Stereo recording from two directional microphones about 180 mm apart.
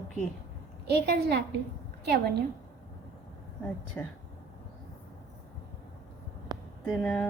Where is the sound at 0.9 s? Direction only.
65° right (ahead or behind).